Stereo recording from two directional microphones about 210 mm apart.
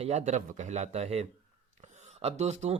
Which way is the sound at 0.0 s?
30° right (ahead or behind).